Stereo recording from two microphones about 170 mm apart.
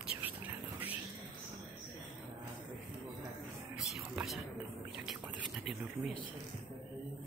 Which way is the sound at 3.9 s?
Centre (ahead or behind).